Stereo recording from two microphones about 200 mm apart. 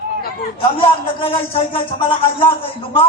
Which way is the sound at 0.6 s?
25° left (ahead or behind).